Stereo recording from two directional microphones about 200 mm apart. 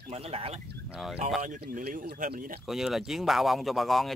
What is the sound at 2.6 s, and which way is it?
Speech, centre (ahead or behind).